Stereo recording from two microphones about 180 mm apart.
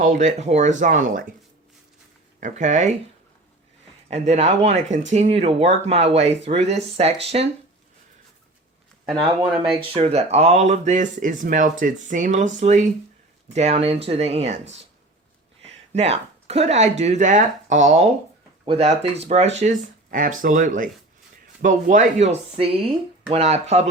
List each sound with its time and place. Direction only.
0.0 s speech: 45° right (ahead or behind)
2.4 s speech: 40° right (ahead or behind)
4.1 s speech: 35° right (ahead or behind)
9.1 s speech: 25° right (ahead or behind)
15.9 s speech: 35° right (ahead or behind)
18.6 s speech: 30° right (ahead or behind)
20.1 s speech: 50° right (ahead or behind)